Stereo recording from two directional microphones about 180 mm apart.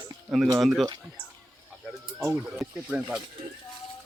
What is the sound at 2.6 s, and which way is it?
Speech, 5° right (ahead or behind).